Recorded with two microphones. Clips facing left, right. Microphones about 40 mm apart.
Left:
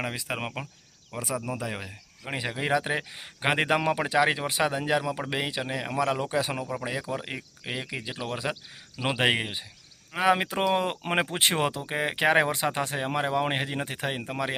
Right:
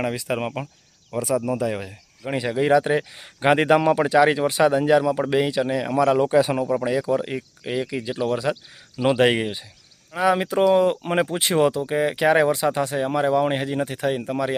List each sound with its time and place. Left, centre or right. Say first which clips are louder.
0.0 s speech: right 7 dB; centre
6.1 s speech: right 10 dB; centre
6.8 s speech: right 10 dB; centre
10.1 s speech: right 3 dB; left